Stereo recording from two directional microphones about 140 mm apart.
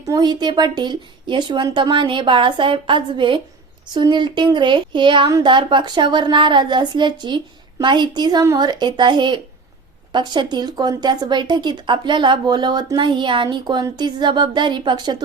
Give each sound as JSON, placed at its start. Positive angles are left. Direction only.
{"t": 0.1, "sound": "speech", "side_deg": -30}